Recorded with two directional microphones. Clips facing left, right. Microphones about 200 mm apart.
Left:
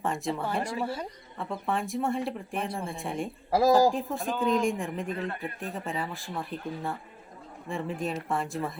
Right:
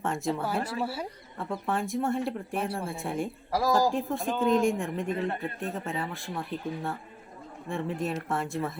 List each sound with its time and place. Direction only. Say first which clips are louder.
0.0 s speech: right 1 dB; centre (ahead or behind)
0.6 s speech: even; 10° left (ahead or behind)
0.9 s speech: left 1 dB; 5° right (ahead or behind)
3.5 s speech: left 4 dB; 20° left (ahead or behind)
3.8 s speech: left 1 dB; centre (ahead or behind)